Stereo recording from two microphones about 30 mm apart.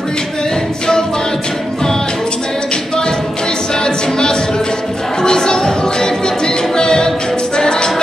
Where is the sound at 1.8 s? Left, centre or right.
Centre.